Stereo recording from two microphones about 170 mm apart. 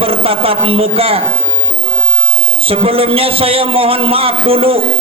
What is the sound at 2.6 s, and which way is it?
A man's voice, 35° right (ahead or behind).